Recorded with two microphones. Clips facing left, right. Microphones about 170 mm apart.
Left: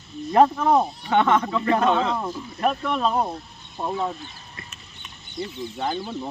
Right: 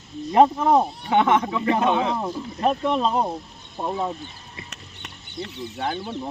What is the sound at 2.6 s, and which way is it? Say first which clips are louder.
Speech: right 2 dB; 25° right (ahead or behind).